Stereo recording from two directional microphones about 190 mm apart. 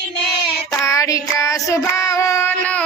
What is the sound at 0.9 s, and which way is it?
Child singing, 15° left (ahead or behind).